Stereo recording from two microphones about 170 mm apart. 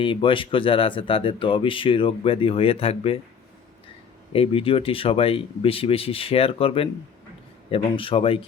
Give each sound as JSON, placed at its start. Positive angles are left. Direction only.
{"t": 0.0, "sound": "speech", "side_deg": 30}
{"t": 4.3, "sound": "speech", "side_deg": 35}